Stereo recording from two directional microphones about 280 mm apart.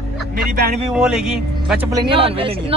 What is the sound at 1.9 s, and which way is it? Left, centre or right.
Speech, centre.